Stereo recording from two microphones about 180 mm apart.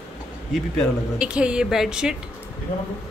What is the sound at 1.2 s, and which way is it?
Speech, 5° right (ahead or behind).